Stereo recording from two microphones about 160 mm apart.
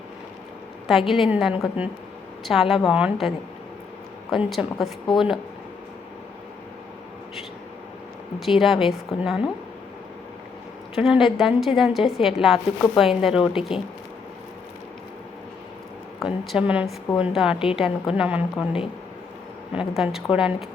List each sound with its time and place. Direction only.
0.9 s a woman's voice: centre (ahead or behind)
8.4 s a woman's voice: centre (ahead or behind)
10.9 s a woman's voice: centre (ahead or behind)
16.2 s a woman's voice: centre (ahead or behind)
19.7 s a woman's voice: 5° right (ahead or behind)